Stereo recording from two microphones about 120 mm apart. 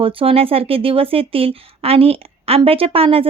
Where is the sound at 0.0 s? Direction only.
50° right (ahead or behind).